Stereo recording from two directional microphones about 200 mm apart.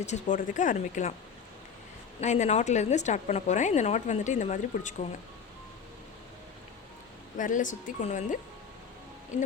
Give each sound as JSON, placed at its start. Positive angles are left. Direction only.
{"t": 0.0, "sound": "a woman's voice", "side_deg": 35}
{"t": 2.2, "sound": "a woman's voice", "side_deg": 35}
{"t": 7.3, "sound": "a woman's voice", "side_deg": 40}